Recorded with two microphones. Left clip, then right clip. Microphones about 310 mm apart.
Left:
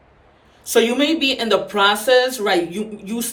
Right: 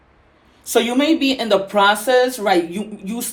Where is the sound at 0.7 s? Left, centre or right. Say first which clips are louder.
Even; centre.